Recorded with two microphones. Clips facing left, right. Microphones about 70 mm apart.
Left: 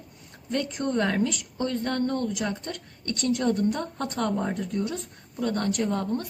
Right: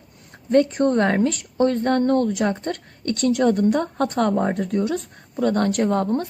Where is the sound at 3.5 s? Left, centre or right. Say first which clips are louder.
Right 6 dB; right.